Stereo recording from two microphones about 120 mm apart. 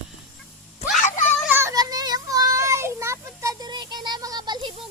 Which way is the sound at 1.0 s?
90° left.